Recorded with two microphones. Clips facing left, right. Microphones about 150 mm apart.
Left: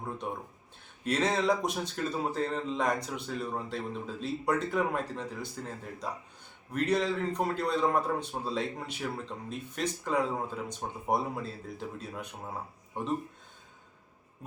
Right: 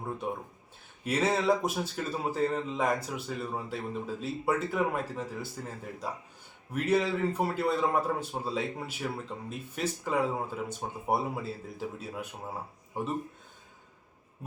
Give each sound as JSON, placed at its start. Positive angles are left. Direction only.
{"t": 1.0, "sound": "a man's voice", "side_deg": -5}